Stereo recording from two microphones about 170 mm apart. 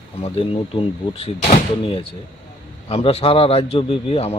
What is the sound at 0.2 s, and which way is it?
A man's voice, 35° left (ahead or behind).